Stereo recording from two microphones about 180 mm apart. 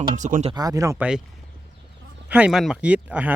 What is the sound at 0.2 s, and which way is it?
Speech, 45° right (ahead or behind).